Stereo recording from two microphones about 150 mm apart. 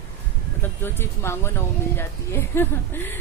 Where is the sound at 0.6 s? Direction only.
15° left (ahead or behind).